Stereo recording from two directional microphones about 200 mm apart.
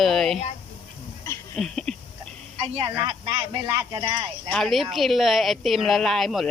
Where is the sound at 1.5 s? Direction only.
5° left (ahead or behind).